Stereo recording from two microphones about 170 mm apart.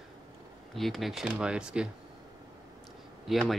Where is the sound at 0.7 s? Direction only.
Centre (ahead or behind).